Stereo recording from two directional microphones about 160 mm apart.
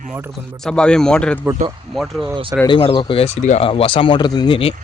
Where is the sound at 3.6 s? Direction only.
35° left (ahead or behind).